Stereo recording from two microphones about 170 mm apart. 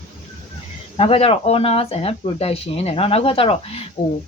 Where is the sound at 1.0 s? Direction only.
35° left (ahead or behind).